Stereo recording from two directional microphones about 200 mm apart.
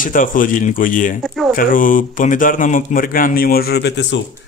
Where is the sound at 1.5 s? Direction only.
45° left (ahead or behind); by 4.2 s 60° left (ahead or behind).